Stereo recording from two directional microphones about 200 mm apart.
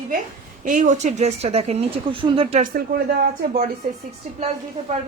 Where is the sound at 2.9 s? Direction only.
45° right (ahead or behind).